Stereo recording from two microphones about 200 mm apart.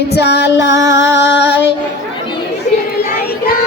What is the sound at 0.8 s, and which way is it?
Music, 15° right (ahead or behind).